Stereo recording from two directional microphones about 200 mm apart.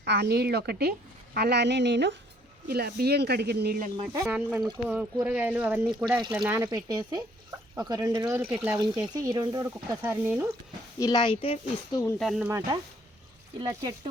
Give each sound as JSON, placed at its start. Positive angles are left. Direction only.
{"t": 0.0, "sound": "speech", "side_deg": -55}
{"t": 3.9, "sound": "speech", "side_deg": -20}
{"t": 4.3, "sound": "speech", "side_deg": -5}
{"t": 6.1, "sound": "speech", "side_deg": -20}
{"t": 8.8, "sound": "speech", "side_deg": -20}
{"t": 11.0, "sound": "speech", "side_deg": 20}
{"t": 12.2, "sound": "speech", "side_deg": 0}
{"t": 13.6, "sound": "speech", "side_deg": -25}